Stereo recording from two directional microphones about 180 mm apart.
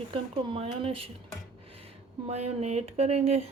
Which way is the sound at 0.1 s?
30° right (ahead or behind).